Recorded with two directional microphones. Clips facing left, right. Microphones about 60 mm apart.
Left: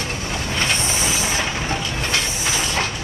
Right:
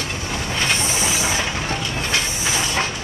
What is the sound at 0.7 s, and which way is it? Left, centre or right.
Vehicle, centre.